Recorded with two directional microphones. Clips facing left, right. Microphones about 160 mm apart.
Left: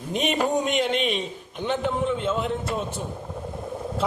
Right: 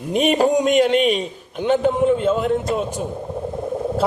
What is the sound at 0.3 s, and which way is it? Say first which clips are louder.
Speech: right 7 dB; 35° right (ahead or behind).